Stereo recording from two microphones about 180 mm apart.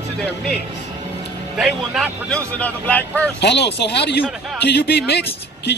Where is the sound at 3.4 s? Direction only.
70° left (ahead or behind).